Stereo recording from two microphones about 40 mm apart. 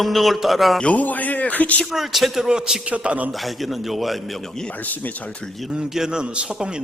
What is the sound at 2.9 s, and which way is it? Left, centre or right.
Speech, right.